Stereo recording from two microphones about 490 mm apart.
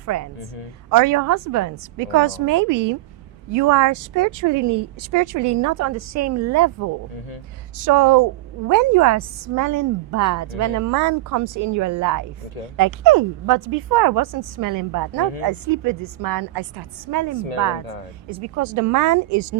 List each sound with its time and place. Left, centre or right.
0.0 s a woman's voice: right